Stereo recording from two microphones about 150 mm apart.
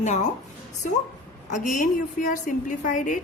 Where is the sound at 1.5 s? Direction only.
55° left (ahead or behind).